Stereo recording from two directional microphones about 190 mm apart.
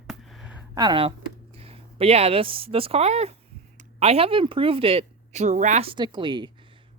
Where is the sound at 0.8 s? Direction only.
25° right (ahead or behind).